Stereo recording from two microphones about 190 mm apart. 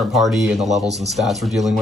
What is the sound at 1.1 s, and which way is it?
Speech, centre (ahead or behind).